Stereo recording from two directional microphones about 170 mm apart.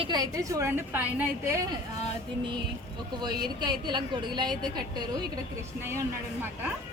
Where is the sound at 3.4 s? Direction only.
25° right (ahead or behind).